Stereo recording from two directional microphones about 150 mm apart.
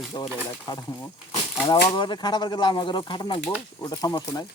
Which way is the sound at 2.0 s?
30° left (ahead or behind).